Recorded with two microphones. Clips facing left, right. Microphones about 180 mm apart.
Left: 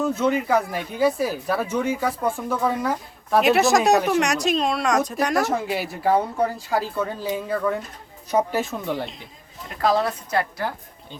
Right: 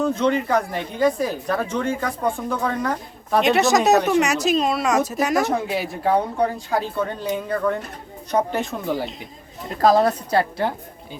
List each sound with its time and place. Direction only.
0.0 s speech: 5° left (ahead or behind)
9.6 s a woman's voice: 40° right (ahead or behind)